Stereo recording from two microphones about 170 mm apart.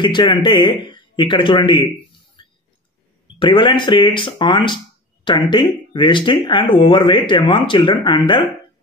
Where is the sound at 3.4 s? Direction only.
30° left (ahead or behind).